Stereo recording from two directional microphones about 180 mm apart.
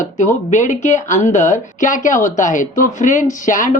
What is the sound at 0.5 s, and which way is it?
Speech, 45° left (ahead or behind).